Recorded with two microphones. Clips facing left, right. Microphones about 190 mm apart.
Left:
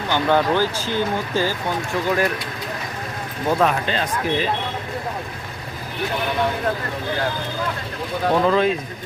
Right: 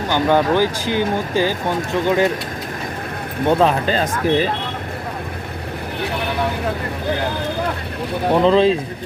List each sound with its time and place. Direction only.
0.1 s speech: 15° right (ahead or behind)
3.4 s speech: 30° right (ahead or behind)
8.3 s speech: 25° right (ahead or behind)